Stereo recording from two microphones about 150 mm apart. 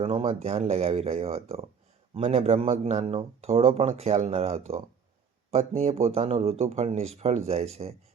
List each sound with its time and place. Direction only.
0.0 s speech: 40° right (ahead or behind)